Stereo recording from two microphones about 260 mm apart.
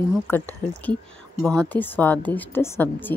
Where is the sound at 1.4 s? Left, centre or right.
Centre.